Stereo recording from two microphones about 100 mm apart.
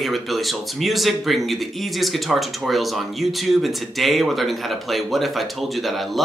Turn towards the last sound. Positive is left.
turn(degrees=0)  # may be behind; listen again after turning